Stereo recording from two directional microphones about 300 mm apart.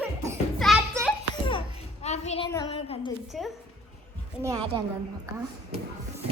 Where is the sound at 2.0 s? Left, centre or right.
Left.